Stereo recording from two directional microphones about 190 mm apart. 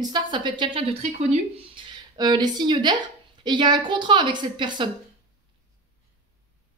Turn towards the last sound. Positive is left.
turn(degrees=-25)  # may be behind; listen again after turning